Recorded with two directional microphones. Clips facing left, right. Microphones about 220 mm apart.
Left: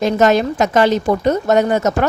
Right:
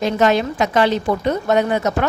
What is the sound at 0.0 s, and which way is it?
Speech, 45° left (ahead or behind).